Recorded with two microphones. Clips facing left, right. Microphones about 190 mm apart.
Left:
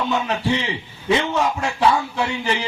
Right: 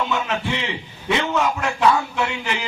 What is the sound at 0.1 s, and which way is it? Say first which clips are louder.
A man's voice: left 3 dB; 35° left (ahead or behind).